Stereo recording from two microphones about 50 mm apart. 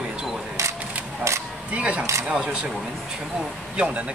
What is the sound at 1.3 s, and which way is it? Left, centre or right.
Single-lens reflex camera, right.